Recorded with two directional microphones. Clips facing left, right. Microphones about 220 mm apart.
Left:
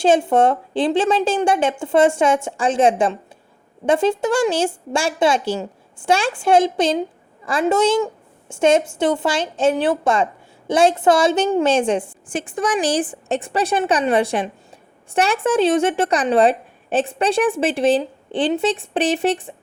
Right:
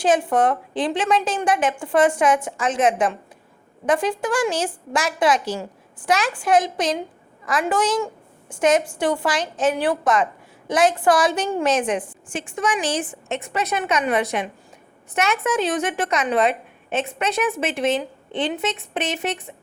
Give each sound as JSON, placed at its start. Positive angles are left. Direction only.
{"t": 0.0, "sound": "a woman's voice", "side_deg": 25}